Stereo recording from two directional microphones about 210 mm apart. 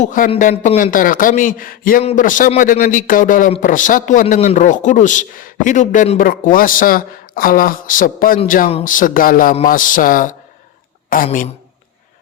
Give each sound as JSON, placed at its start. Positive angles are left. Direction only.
{"t": 0.0, "sound": "speech", "side_deg": 40}